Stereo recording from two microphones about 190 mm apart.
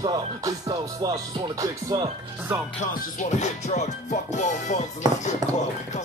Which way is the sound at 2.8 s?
40° left (ahead or behind).